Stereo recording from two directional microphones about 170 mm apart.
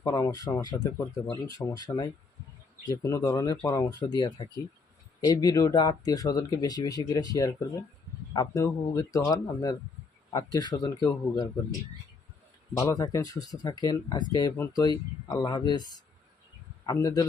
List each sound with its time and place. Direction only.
0.0 s speech: 20° left (ahead or behind)
12.7 s speech: 20° left (ahead or behind)